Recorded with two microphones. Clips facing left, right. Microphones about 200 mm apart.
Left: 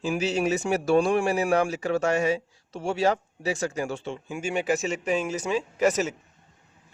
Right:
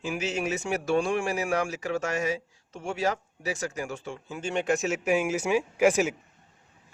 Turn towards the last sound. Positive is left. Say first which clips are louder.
# right 1 dB
turn(degrees=-10)  # may be behind; listen again after turning